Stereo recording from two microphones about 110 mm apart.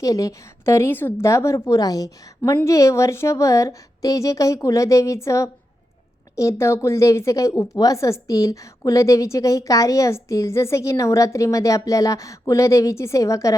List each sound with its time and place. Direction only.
0.0 s a woman's voice: 30° left (ahead or behind)